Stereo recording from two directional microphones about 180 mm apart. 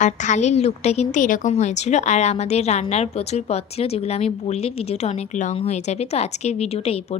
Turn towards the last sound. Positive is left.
turn(degrees=35)  # may be behind; listen again after turning